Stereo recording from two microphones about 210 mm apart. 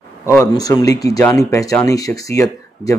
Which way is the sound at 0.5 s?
20° left (ahead or behind).